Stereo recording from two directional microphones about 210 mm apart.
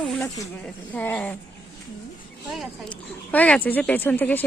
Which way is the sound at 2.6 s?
5° left (ahead or behind).